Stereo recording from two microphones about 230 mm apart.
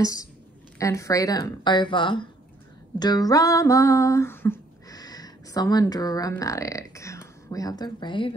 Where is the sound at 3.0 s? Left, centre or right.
Centre.